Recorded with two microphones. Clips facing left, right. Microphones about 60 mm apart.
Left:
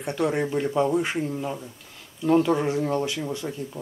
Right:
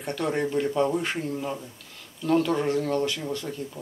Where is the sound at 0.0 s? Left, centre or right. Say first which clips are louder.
Left 2 dB; centre.